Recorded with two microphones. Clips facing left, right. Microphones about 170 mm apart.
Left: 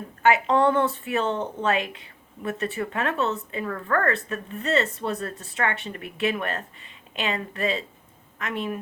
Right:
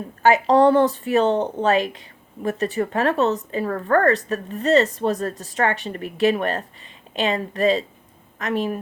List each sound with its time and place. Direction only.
0.2 s speech: 35° right (ahead or behind)